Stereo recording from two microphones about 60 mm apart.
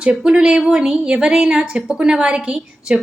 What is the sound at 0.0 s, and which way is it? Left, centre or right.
A woman's voice, centre.